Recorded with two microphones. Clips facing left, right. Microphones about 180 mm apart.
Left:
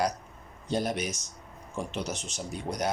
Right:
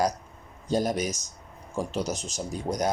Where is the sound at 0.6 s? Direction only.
40° right (ahead or behind).